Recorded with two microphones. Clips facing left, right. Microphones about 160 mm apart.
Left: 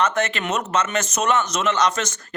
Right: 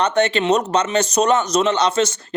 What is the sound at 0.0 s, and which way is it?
Speech, 30° right (ahead or behind).